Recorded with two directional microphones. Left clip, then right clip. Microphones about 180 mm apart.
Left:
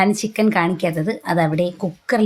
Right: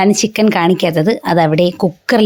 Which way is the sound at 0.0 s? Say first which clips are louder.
Right 6 dB; 40° right (ahead or behind).